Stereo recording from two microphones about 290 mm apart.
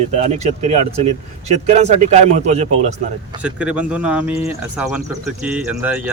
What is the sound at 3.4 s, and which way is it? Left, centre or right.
Speech, centre.